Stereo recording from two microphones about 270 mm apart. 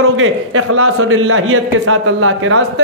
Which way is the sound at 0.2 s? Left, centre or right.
Right.